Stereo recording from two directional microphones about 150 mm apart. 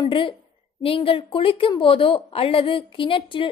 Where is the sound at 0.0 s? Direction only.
35° left (ahead or behind).